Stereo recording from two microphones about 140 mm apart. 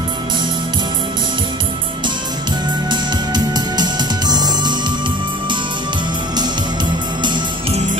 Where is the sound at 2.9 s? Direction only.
30° right (ahead or behind).